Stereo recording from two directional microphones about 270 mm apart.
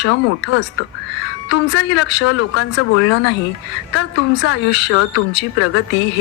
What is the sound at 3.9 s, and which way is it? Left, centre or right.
Speech, left.